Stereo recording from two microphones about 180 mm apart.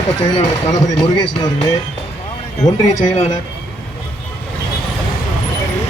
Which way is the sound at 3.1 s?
35° left (ahead or behind).